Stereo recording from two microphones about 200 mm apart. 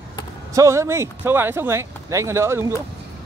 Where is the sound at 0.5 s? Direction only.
15° right (ahead or behind).